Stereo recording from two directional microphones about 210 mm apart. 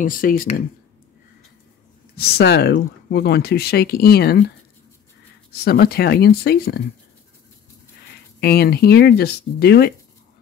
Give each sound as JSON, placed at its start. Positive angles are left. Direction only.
{"t": 0.0, "sound": "speech", "side_deg": 40}
{"t": 2.1, "sound": "speech", "side_deg": 50}
{"t": 5.6, "sound": "speech", "side_deg": 50}
{"t": 8.4, "sound": "speech", "side_deg": 45}